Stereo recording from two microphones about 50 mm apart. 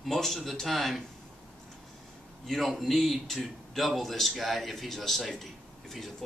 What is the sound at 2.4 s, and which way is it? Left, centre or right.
A man's voice, centre.